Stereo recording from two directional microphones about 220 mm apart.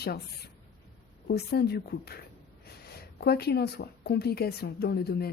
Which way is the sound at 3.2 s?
45° left (ahead or behind).